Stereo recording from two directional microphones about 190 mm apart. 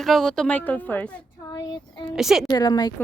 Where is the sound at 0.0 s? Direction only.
Centre (ahead or behind).